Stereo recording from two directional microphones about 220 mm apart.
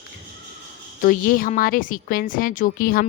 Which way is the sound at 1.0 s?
40° left (ahead or behind).